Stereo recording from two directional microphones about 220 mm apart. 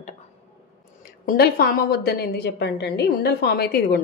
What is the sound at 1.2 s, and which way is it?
A woman's voice, 40° left (ahead or behind).